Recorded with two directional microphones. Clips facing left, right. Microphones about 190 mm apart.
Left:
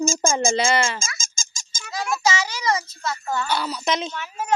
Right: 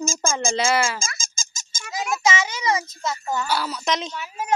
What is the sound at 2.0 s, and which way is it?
A child's voice, 20° right (ahead or behind).